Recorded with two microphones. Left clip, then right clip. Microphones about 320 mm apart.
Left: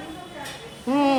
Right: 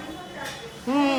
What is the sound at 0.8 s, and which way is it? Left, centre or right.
Speech, centre.